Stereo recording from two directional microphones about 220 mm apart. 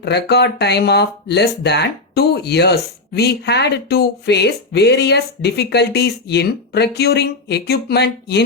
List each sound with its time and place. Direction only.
0.0 s speech: 50° left (ahead or behind)